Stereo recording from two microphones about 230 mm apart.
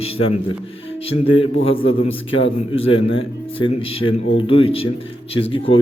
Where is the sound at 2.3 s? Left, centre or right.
Left.